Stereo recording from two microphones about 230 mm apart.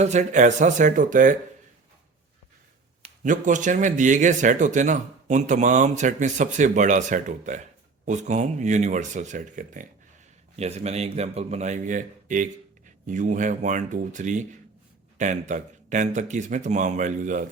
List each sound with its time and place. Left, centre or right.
0.0 s speech: right
3.0 s a man's voice: right